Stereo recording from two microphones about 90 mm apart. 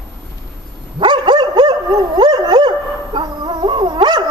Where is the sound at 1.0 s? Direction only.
60° right (ahead or behind).